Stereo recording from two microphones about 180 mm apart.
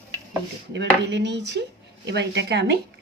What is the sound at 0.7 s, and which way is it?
Speech, 80° right.